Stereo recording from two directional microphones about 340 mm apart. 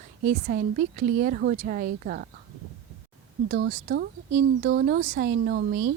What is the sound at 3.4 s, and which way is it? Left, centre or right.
A woman's voice, right.